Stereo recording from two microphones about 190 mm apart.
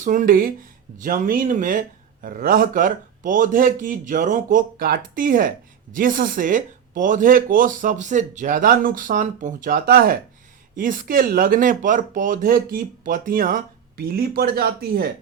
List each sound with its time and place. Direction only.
0.0 s speech: 45° right (ahead or behind)